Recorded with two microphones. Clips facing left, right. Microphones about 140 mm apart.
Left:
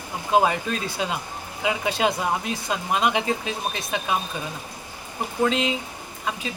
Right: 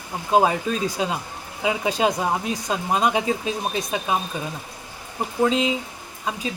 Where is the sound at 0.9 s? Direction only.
30° right (ahead or behind).